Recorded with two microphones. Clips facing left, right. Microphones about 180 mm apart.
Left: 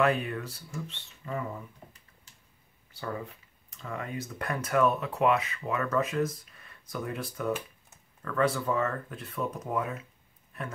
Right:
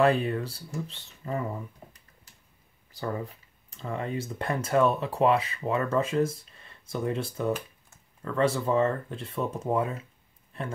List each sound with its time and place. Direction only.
0.0 s speech: 30° right (ahead or behind)
3.7 s speech: 30° right (ahead or behind)